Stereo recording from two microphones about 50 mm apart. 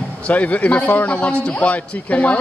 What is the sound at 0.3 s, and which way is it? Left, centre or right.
A man's voice, left.